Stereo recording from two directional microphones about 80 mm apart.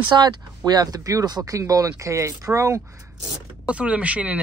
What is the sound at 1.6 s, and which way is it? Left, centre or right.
Speech, right.